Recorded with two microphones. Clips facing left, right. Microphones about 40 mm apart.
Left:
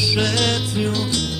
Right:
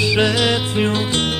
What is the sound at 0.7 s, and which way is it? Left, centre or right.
Music, right.